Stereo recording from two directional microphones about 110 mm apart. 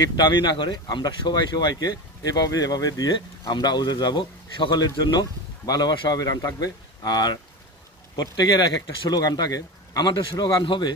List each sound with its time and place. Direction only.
0.1 s speech: 45° left (ahead or behind)